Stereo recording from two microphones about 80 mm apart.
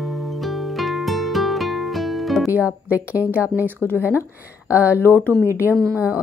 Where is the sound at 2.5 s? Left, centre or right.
Centre.